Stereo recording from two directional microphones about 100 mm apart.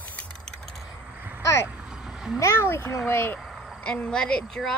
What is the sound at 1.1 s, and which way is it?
Vehicle, 20° right (ahead or behind).